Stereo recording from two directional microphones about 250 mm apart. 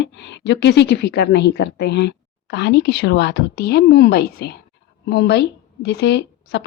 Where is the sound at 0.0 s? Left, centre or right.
Left.